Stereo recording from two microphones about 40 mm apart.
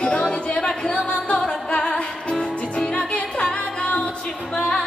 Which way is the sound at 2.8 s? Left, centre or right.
Left.